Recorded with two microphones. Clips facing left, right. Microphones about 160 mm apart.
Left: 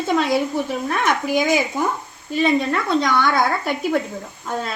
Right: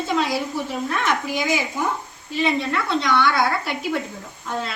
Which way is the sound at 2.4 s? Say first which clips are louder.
Left 3 dB; 45° left (ahead or behind).